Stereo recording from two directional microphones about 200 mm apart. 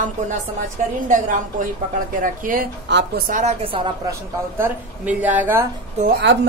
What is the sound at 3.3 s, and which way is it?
Speech, 40° right (ahead or behind).